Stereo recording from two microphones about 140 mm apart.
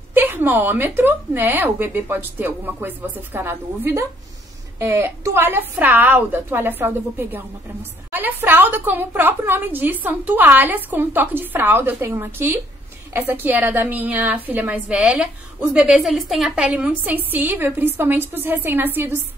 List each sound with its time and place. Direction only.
0.1 s a woman's voice: 15° right (ahead or behind)